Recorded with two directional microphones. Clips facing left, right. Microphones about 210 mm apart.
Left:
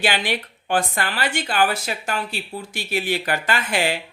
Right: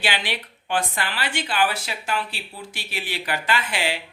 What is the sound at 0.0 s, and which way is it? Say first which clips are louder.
Speech: left 5 dB; 45° left (ahead or behind).